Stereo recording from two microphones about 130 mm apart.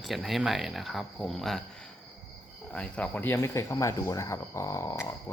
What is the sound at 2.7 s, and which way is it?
Speech, 10° left (ahead or behind).